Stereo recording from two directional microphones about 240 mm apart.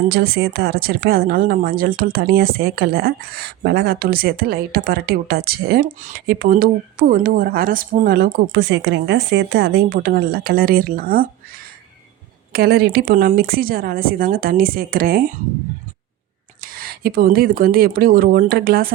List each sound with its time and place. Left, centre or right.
0.1 s speech: right
12.5 s speech: right
16.6 s speech: right